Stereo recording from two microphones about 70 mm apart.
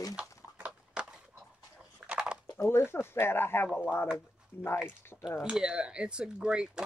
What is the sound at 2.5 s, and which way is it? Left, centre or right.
Speech, left.